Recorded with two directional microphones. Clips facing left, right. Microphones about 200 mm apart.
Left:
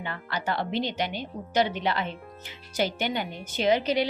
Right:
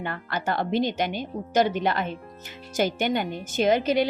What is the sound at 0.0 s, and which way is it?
Speech, 50° right (ahead or behind).